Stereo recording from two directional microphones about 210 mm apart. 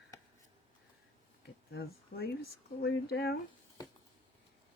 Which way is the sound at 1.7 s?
50° left (ahead or behind).